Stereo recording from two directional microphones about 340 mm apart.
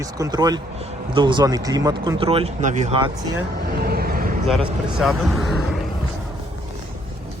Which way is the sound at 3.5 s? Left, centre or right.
Right.